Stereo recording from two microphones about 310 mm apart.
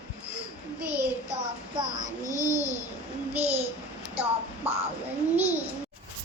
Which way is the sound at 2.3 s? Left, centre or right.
Centre.